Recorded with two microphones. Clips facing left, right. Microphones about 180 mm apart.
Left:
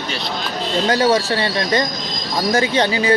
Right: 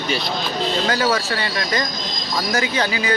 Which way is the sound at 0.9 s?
30° left (ahead or behind).